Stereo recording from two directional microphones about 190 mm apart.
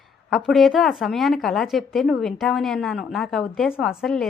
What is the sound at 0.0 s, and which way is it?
Speech, centre (ahead or behind).